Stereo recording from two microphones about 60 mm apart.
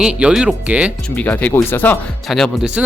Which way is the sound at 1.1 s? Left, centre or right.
Left.